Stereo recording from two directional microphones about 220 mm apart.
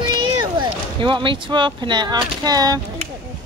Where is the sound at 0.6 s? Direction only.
20° right (ahead or behind).